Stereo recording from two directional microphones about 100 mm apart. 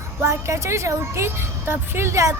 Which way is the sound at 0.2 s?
30° right (ahead or behind).